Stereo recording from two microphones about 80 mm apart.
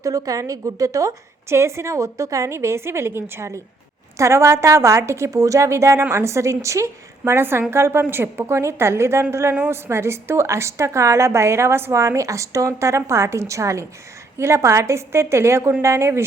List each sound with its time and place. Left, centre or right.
0.0 s a woman's voice: right